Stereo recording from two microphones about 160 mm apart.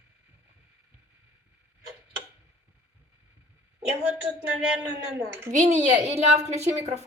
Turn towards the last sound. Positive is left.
turn(degrees=-45)  # may be behind; listen again after turning